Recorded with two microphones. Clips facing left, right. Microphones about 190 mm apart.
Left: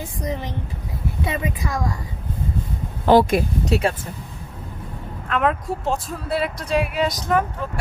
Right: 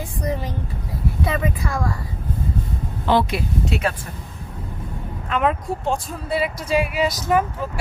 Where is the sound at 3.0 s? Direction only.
45° left (ahead or behind).